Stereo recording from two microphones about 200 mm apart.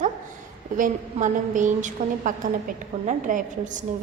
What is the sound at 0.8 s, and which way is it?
A woman's voice, 40° right (ahead or behind).